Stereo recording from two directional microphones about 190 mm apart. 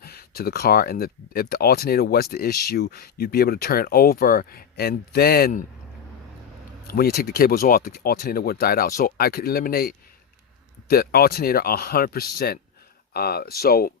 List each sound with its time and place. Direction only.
0.0 s speech: 55° left (ahead or behind)
6.8 s speech: 55° left (ahead or behind)